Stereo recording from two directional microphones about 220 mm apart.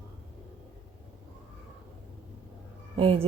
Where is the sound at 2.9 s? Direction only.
25° right (ahead or behind).